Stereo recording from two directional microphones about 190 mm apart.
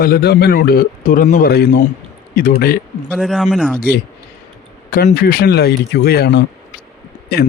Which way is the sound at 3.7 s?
55° left (ahead or behind).